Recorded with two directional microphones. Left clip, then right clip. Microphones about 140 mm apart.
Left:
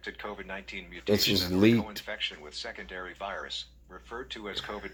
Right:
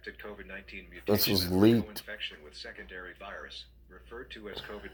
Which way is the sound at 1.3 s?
20° left (ahead or behind).